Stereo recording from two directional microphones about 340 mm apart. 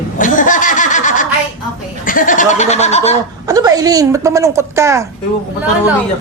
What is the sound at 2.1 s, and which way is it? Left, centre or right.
Goat, left.